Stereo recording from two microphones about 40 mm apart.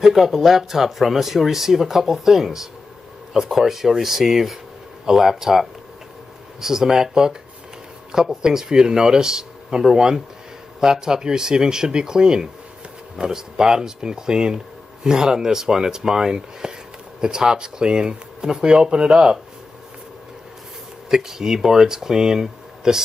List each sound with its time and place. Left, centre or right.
0.0 s speech: centre
21.1 s speech: centre